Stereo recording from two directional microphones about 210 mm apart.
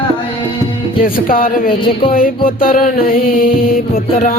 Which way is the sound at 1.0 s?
40° left (ahead or behind).